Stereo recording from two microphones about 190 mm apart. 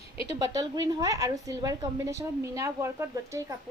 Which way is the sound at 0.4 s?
20° right (ahead or behind).